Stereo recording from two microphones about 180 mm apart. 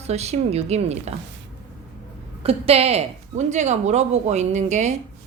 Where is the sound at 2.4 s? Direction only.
35° right (ahead or behind).